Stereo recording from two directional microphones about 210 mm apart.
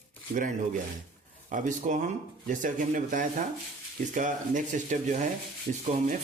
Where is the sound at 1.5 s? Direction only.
35° right (ahead or behind).